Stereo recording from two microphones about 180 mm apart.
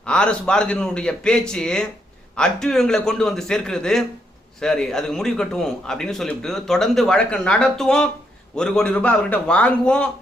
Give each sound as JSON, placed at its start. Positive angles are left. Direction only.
{"t": 0.0, "sound": "a man's voice", "side_deg": 5}